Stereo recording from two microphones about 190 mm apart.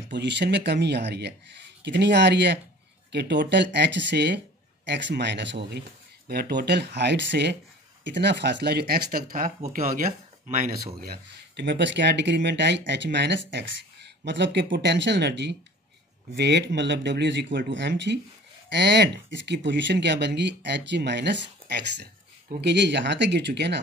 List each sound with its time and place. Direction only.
0.1 s speech: 65° right (ahead or behind)